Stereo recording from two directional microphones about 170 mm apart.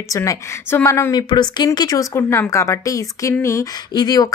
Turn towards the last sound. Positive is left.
turn(degrees=20)  # may be behind; listen again after turning